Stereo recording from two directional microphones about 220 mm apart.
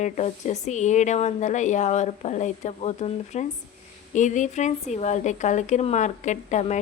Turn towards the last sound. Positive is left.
turn(degrees=30)  # may be behind; listen again after turning